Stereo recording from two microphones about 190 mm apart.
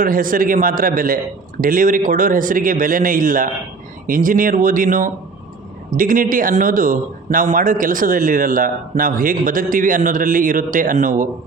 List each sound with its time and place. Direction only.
0.0 s speech: 45° right (ahead or behind)